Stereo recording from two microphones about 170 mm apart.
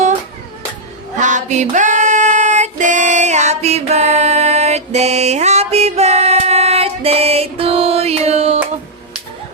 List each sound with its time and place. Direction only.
1.2 s female singing: 45° right (ahead or behind)